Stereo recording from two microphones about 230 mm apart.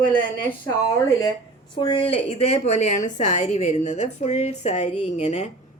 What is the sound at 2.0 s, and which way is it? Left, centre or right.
A woman's voice, left.